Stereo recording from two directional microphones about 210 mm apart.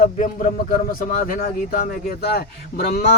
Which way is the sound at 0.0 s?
40° left (ahead or behind).